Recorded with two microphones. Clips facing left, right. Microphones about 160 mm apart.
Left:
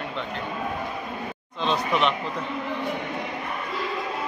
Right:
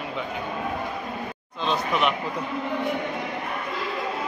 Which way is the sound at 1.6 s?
Centre (ahead or behind).